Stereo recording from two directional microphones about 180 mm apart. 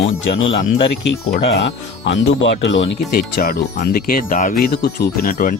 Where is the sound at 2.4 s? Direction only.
90° left.